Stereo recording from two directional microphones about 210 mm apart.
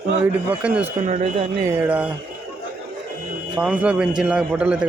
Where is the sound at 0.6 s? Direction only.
5° right (ahead or behind).